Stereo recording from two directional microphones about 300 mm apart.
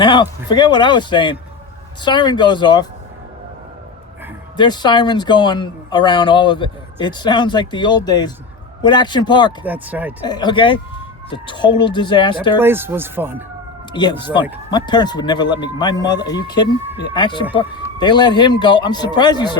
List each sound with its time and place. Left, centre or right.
0.0 s speech: centre
4.5 s speech: centre
9.6 s speech: centre
10.2 s speech: centre
12.5 s speech: centre
14.7 s speech: centre